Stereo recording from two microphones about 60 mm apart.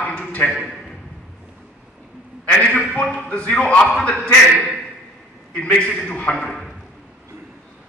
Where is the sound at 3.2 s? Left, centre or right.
Left.